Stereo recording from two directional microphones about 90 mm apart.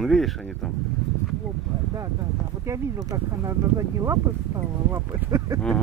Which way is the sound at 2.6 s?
35° right (ahead or behind).